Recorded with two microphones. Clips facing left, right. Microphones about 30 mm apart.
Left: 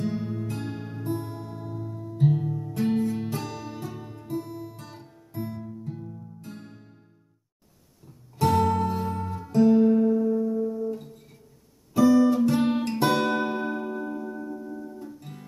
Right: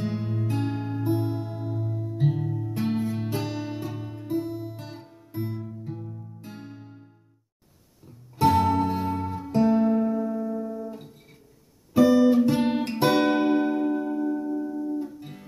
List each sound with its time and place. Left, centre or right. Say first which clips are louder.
0.0 s music: even; centre
8.4 s music: right 2 dB; centre
11.9 s guitar: right 1 dB; centre
15.0 s music: right 7 dB; centre